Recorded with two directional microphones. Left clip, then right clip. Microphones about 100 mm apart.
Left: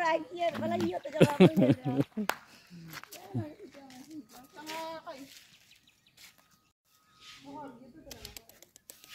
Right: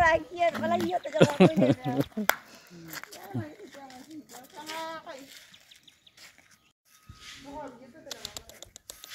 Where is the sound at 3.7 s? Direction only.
55° right (ahead or behind).